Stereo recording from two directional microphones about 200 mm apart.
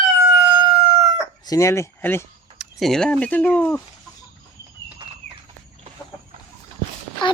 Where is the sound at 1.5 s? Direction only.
15° left (ahead or behind).